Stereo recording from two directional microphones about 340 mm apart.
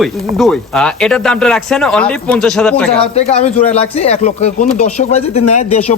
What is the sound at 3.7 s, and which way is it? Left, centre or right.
Speech, centre.